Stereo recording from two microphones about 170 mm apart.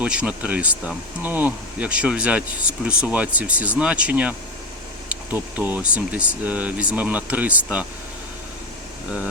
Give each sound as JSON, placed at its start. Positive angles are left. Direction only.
{"t": 0.0, "sound": "speech", "side_deg": -5}